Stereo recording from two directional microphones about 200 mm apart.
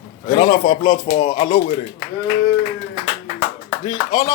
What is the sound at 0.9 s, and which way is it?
Speech, 25° left (ahead or behind).